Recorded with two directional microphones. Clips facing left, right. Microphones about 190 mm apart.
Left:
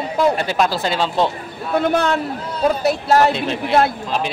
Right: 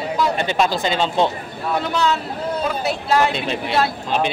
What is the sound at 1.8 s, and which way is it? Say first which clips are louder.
Speech: left 4 dB; 55° left (ahead or behind).